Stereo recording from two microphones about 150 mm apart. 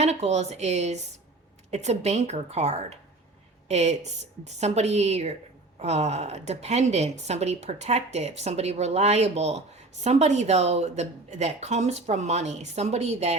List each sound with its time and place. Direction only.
0.0 s a woman's voice: 45° right (ahead or behind)